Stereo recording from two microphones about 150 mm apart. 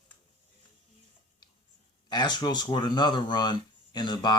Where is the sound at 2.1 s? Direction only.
30° left (ahead or behind).